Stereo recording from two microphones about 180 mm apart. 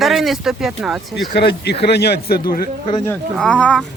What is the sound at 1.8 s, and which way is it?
Speech, 65° left (ahead or behind).